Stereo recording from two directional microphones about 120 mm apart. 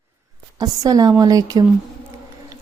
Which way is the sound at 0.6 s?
30° right (ahead or behind).